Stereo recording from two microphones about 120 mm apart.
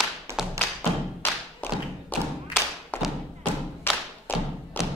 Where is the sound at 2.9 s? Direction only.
15° left (ahead or behind).